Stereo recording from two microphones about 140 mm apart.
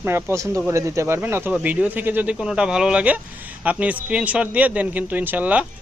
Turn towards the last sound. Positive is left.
turn(degrees=-10)  # may be behind; listen again after turning